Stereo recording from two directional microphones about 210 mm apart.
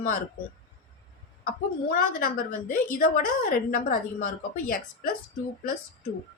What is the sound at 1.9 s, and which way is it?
A woman's voice, 40° left (ahead or behind).